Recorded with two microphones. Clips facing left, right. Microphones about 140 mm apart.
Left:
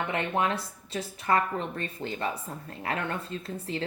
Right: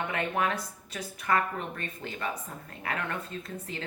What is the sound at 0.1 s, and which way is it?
A woman's voice, 30° left (ahead or behind).